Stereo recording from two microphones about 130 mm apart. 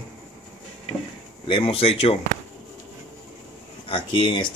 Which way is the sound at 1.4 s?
40° left (ahead or behind).